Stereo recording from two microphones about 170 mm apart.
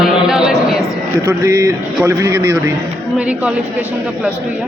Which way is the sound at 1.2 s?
20° right (ahead or behind).